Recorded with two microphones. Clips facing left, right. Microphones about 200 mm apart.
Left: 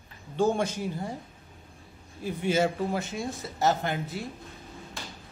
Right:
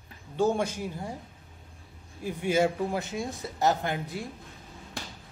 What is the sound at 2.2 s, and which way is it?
A woman's voice, 10° right (ahead or behind).